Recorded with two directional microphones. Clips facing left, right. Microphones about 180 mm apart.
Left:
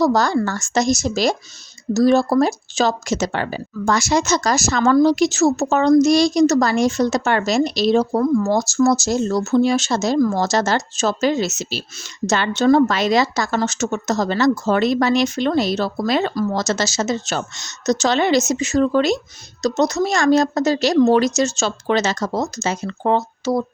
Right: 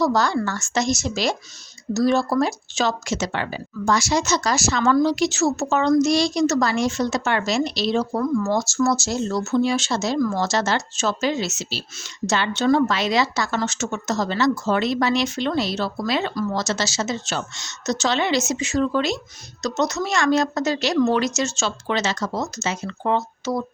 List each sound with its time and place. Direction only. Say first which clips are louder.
0.0 s a woman's voice: left 3 dB; 40° left (ahead or behind)
19.6 s a woman's voice: left 5 dB; 35° left (ahead or behind)